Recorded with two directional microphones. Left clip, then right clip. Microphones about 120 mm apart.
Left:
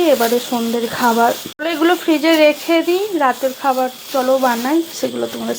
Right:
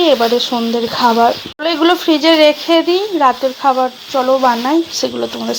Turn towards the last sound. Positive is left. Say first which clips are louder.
# right 2 dB
turn(degrees=0)  # may be behind; listen again after turning